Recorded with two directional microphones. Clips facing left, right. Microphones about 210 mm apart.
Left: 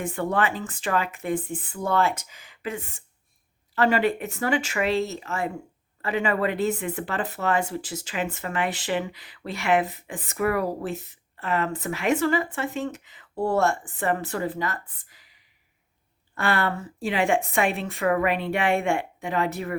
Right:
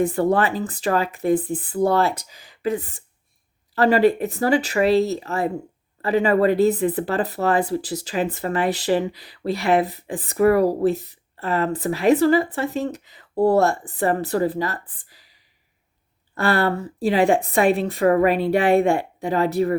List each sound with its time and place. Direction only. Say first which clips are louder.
0.0 s speech: right 7 dB; 35° right (ahead or behind)